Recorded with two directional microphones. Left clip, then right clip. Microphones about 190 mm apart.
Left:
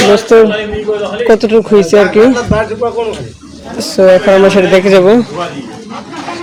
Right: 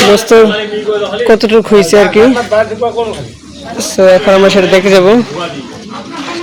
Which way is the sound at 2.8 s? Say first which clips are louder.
Right 1 dB; 50° left (ahead or behind).